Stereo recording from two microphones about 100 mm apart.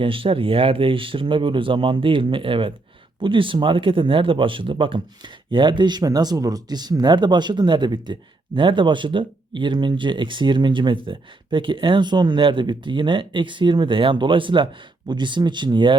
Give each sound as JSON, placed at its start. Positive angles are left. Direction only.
{"t": 0.0, "sound": "speech", "side_deg": -60}